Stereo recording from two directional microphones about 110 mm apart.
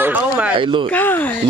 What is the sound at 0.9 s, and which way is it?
Speech, 20° left (ahead or behind).